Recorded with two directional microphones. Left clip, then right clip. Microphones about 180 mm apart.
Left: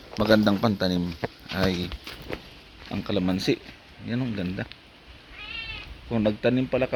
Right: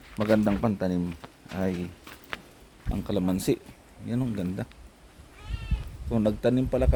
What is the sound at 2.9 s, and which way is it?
Speech, 15° right (ahead or behind).